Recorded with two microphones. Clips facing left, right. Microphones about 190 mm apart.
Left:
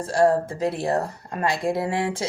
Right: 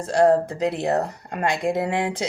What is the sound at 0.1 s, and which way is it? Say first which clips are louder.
Speech: right 2 dB; 20° right (ahead or behind).